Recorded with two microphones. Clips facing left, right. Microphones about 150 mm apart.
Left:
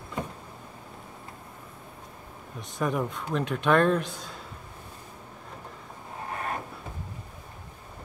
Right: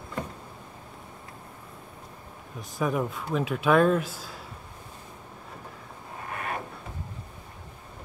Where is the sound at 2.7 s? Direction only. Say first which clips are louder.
Right 1 dB; centre (ahead or behind).